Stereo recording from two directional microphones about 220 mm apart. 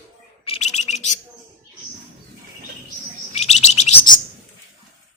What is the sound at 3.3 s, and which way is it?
Chirp, 30° left (ahead or behind).